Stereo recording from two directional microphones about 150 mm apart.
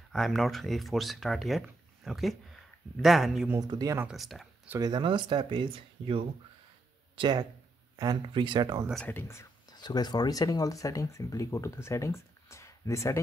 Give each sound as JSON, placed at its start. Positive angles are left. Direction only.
{"t": 0.1, "sound": "speech", "side_deg": 0}
{"t": 3.5, "sound": "speech", "side_deg": -25}
{"t": 4.0, "sound": "speech", "side_deg": 0}
{"t": 4.7, "sound": "speech", "side_deg": -25}
{"t": 8.9, "sound": "speech", "side_deg": 10}